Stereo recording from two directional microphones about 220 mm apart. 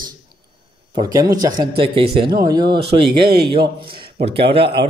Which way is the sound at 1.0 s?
15° right (ahead or behind).